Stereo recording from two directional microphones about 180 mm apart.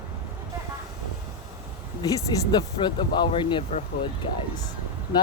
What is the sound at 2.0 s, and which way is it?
Speech, 20° left (ahead or behind).